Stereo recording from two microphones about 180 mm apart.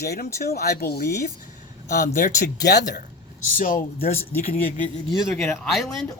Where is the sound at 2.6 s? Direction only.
70° left (ahead or behind).